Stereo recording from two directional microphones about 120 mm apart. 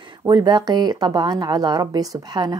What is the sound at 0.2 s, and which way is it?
A woman's voice, 35° right (ahead or behind).